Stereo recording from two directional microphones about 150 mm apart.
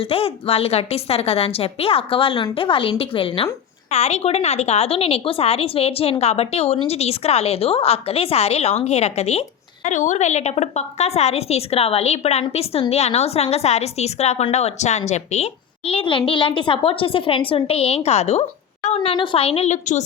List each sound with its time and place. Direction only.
0.1 s a woman's voice: 40° left (ahead or behind)
9.8 s a woman's voice: 55° left (ahead or behind)
15.9 s a woman's voice: 35° left (ahead or behind)